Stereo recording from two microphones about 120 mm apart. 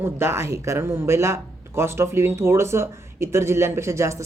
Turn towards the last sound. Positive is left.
turn(degrees=-25)  # may be behind; listen again after turning